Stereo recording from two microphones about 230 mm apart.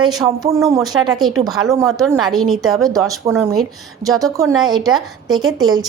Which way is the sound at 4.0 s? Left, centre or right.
Centre.